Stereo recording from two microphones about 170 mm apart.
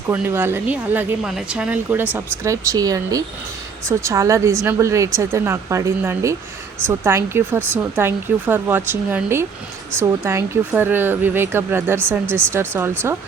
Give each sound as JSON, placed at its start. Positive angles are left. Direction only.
{"t": 0.1, "sound": "speech", "side_deg": -15}